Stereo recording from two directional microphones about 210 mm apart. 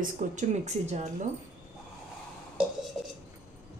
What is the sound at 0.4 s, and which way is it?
Speech, 35° right (ahead or behind).